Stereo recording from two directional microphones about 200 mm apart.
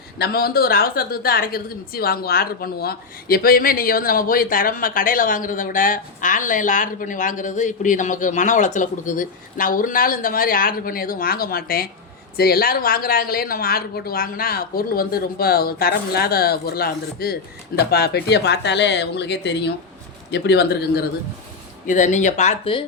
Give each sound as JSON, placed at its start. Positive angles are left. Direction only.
{"t": 0.2, "sound": "a woman's voice", "side_deg": 50}
{"t": 21.8, "sound": "speech", "side_deg": 40}